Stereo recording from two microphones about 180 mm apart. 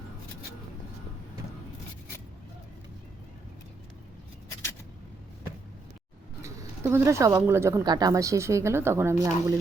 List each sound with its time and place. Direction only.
6.4 s speech: 15° right (ahead or behind)